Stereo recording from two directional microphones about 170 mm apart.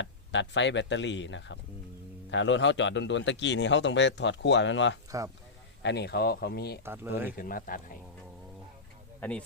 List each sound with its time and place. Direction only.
0.0 s a man's voice: 90° left; by 6.7 s 70° left (ahead or behind)
6.8 s speech: 15° right (ahead or behind)
7.3 s speech: 55° left (ahead or behind)
9.2 s speech: 10° left (ahead or behind)